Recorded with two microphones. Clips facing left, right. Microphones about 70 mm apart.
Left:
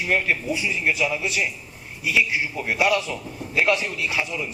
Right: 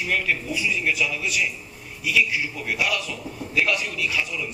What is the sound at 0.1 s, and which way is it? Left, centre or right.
A man's voice, left.